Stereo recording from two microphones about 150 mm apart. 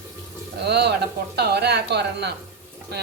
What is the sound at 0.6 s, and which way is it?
Speech, 90° right.